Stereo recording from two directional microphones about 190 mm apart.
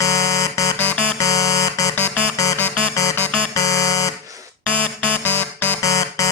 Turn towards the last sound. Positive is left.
turn(degrees=15)  # may be behind; listen again after turning